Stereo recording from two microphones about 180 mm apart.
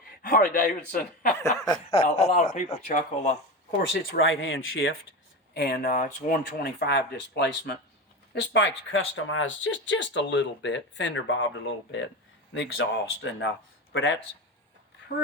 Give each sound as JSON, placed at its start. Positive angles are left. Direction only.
{"t": 0.2, "sound": "a man's voice", "side_deg": 50}
{"t": 1.3, "sound": "speech", "side_deg": 15}
{"t": 2.0, "sound": "speech", "side_deg": 40}
{"t": 4.2, "sound": "speech", "side_deg": 90}
{"t": 5.5, "sound": "speech", "side_deg": 60}
{"t": 8.4, "sound": "speech", "side_deg": 90}
{"t": 12.5, "sound": "speech", "side_deg": 90}